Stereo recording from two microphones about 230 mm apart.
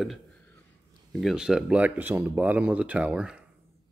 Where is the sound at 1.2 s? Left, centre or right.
Centre.